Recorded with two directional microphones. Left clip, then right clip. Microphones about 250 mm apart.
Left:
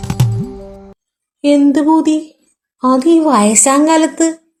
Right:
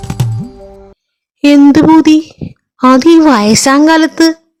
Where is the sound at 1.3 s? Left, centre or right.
Right.